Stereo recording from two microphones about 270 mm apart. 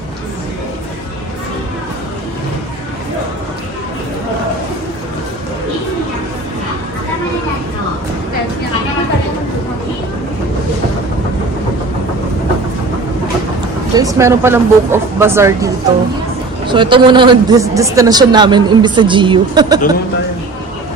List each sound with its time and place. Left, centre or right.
13.9 s a woman's voice: centre